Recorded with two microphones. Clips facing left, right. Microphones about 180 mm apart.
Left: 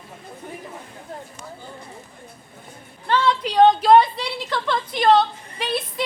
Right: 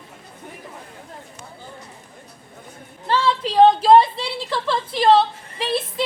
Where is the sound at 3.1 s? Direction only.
30° right (ahead or behind).